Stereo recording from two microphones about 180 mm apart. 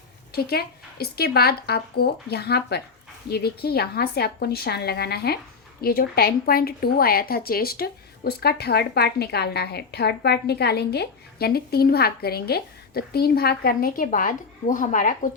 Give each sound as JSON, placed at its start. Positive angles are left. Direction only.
{"t": 0.3, "sound": "a woman's voice", "side_deg": 60}